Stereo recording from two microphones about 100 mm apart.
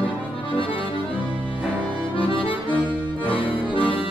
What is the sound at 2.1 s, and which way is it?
Accordion, 60° left (ahead or behind).